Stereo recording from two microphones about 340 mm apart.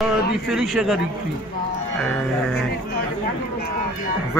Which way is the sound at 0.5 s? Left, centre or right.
Centre.